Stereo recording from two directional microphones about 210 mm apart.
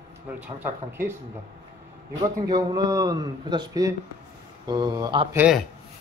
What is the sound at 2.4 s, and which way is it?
A man's voice, 20° right (ahead or behind).